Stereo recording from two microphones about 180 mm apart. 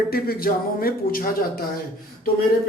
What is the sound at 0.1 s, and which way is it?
Speech, 55° left (ahead or behind).